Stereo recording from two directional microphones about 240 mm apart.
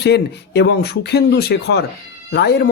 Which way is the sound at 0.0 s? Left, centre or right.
Left.